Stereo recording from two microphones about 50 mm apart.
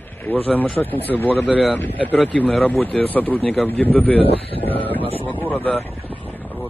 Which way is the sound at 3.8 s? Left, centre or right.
Left.